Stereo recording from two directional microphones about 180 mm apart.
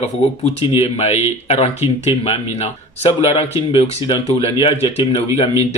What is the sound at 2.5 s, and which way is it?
A man's voice, 35° left (ahead or behind).